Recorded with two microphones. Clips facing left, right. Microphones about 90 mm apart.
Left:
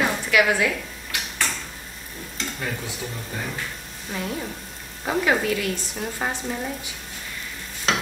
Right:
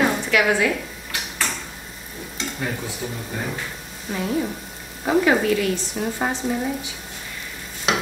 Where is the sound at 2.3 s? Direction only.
5° right (ahead or behind).